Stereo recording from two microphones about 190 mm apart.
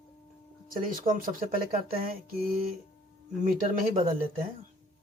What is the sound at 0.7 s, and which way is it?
Speech, 45° right (ahead or behind).